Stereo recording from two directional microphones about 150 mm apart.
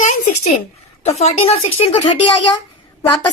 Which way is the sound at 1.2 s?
40° left (ahead or behind).